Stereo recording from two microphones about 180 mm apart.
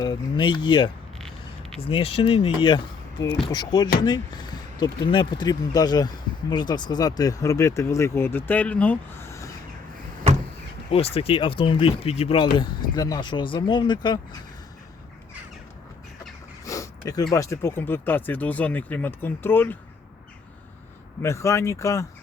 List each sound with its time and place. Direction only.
0.0 s speech: 25° left (ahead or behind)
1.9 s speech: 30° left (ahead or behind); by 9.5 s 15° left (ahead or behind)
10.9 s speech: 35° left (ahead or behind)
16.6 s a sound: 15° left (ahead or behind)
17.3 s speech: 15° left (ahead or behind)
21.2 s speech: 15° left (ahead or behind)